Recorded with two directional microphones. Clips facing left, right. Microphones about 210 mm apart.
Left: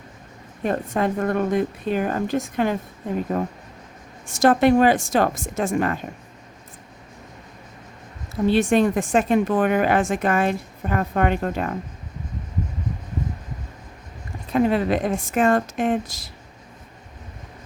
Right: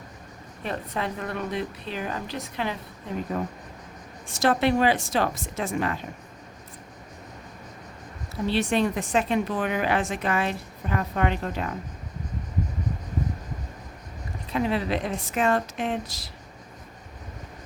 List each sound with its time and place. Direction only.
0.6 s a woman's voice: 45° left (ahead or behind)
8.4 s a woman's voice: 50° left (ahead or behind)
14.5 s a woman's voice: 50° left (ahead or behind)